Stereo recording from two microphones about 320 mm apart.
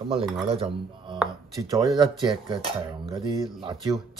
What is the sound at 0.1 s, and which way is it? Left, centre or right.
Speech, centre.